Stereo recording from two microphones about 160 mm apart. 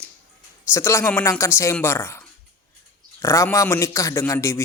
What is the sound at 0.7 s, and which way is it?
A man's voice, 15° left (ahead or behind).